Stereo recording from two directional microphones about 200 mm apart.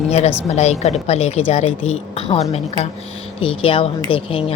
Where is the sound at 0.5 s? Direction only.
35° left (ahead or behind).